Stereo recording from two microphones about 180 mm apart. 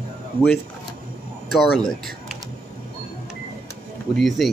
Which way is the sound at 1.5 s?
Centre (ahead or behind).